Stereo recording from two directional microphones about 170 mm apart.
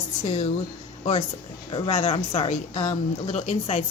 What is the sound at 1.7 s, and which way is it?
A woman's voice, 35° left (ahead or behind).